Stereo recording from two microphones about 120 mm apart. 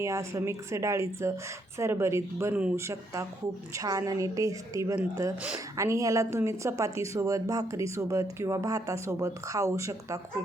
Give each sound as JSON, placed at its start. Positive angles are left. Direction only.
{"t": 0.0, "sound": "a woman's voice", "side_deg": -25}